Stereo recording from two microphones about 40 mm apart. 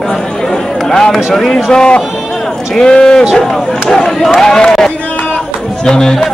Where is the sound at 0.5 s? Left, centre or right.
Centre.